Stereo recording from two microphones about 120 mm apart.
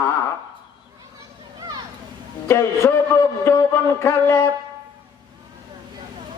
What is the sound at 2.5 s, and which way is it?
A man's voice, 20° left (ahead or behind).